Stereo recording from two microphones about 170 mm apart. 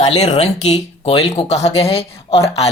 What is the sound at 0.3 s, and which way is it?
A woman's voice, 40° left (ahead or behind).